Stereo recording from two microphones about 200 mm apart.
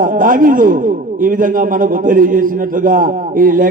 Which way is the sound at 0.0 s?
45° right (ahead or behind).